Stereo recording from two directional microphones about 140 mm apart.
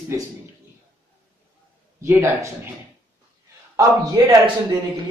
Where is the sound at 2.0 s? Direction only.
20° right (ahead or behind).